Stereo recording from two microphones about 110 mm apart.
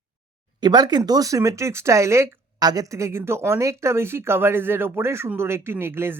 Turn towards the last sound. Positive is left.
turn(degrees=-20)  # may be behind; listen again after turning